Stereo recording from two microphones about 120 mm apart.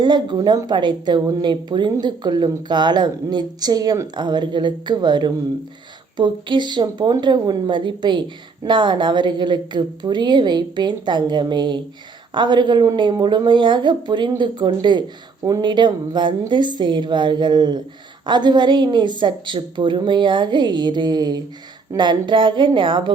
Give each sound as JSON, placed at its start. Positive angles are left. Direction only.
{"t": 0.0, "sound": "a woman's voice", "side_deg": -40}